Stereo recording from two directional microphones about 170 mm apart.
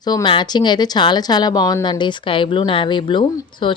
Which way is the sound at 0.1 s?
25° left (ahead or behind).